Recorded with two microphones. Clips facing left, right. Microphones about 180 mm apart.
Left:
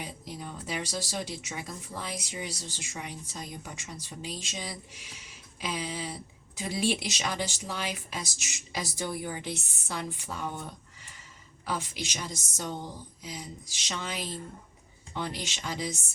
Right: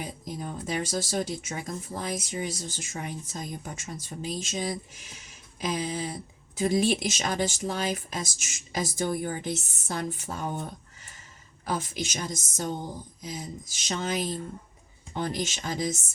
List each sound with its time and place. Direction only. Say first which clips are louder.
0.0 s speech: right 4 dB; 45° right (ahead or behind)